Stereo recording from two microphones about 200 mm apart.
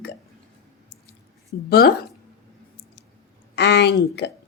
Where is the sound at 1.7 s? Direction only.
50° left (ahead or behind).